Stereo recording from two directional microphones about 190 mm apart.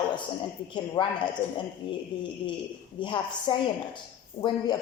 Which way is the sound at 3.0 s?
25° left (ahead or behind).